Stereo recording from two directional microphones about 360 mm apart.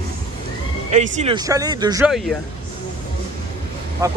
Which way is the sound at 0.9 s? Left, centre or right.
Centre.